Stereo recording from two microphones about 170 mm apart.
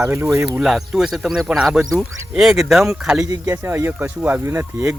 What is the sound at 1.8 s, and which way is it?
Speech, 15° right (ahead or behind).